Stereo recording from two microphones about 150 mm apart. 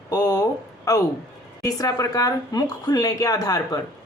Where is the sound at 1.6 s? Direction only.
25° left (ahead or behind).